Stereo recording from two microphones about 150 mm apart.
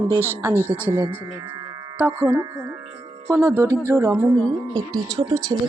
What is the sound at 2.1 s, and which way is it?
Speech, 25° right (ahead or behind).